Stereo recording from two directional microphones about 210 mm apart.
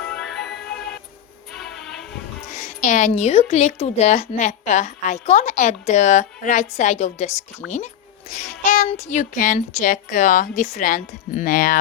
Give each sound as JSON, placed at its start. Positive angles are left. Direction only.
{"t": 0.0, "sound": "music", "side_deg": 5}
{"t": 2.5, "sound": "a woman's voice", "side_deg": 35}